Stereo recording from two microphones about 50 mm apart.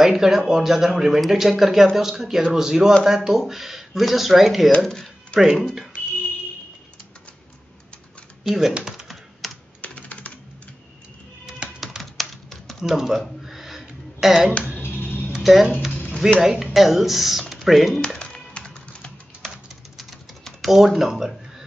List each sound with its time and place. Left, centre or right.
0.0 s speech: centre
4.8 s music: centre
5.4 s speech: centre
8.5 s speech: centre
8.8 s computer keyboard: centre
9.8 s computer keyboard: left
11.8 s typing: centre
12.8 s speech: centre
13.2 s a sound: centre
14.8 s music: left
15.4 s speech: centre
18.2 s music: left
20.0 s typing: centre